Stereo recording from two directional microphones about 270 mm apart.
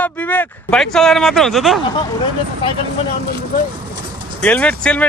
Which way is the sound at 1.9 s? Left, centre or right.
Centre.